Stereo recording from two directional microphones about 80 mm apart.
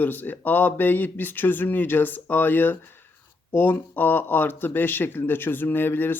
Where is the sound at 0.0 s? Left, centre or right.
Left.